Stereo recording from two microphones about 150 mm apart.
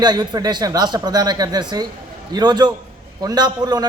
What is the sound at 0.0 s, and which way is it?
A man's voice, 30° right (ahead or behind).